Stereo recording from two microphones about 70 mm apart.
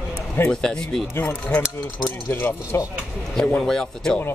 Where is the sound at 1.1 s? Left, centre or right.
Left.